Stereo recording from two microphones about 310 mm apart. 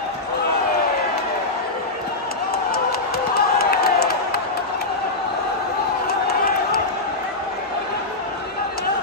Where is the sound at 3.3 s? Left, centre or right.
Left.